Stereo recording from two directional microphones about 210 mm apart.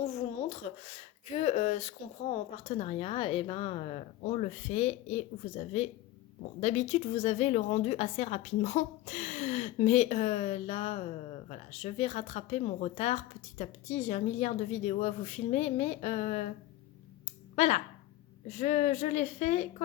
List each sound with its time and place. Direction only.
0.0 s speech: 30° left (ahead or behind)
17.2 s a sound: 35° left (ahead or behind)
18.5 s speech: 35° left (ahead or behind)